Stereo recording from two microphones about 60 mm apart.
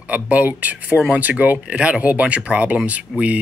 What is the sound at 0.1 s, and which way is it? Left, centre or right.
Speech, right.